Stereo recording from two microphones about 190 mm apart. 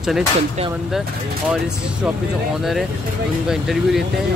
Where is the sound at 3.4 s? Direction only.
Centre (ahead or behind).